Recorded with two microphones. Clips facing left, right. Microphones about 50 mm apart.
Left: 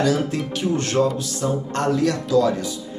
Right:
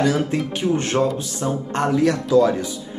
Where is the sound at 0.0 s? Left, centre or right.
Right.